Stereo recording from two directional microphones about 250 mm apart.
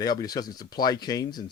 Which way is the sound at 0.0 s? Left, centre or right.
Centre.